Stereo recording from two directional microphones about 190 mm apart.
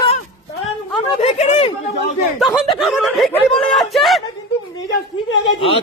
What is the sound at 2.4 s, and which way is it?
Snicker, centre (ahead or behind).